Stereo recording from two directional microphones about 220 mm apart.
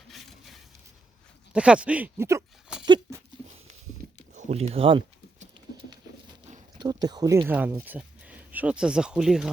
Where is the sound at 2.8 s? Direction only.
20° right (ahead or behind).